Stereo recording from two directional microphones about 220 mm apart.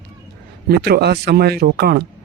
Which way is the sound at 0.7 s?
45° right (ahead or behind).